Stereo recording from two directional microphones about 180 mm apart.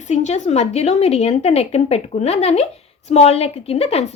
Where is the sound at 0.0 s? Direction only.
40° left (ahead or behind).